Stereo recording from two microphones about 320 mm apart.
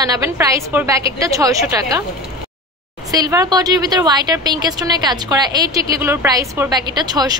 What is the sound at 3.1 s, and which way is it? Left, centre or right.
Speech, centre.